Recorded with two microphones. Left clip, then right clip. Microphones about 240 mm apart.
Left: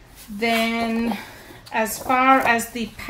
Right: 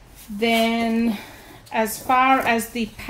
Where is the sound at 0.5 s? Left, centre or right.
Left.